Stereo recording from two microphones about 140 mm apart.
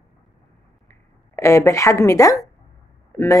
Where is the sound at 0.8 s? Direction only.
20° left (ahead or behind).